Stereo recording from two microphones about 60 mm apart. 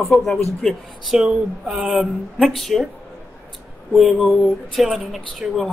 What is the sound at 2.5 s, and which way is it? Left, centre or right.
Speech, centre.